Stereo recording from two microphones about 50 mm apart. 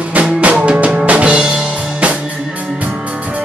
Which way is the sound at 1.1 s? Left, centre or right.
Right.